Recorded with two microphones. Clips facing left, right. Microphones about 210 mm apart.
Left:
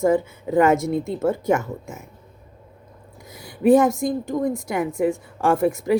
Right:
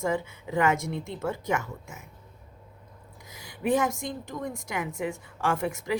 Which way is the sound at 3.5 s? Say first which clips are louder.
Left 10 dB; 40° left (ahead or behind).